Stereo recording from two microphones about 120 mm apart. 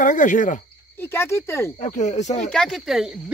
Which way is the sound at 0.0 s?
90° left.